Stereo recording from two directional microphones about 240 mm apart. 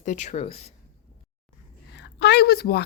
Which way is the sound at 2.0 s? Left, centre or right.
Left.